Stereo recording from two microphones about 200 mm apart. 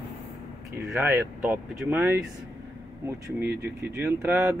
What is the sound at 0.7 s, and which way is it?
Speech, 10° right (ahead or behind).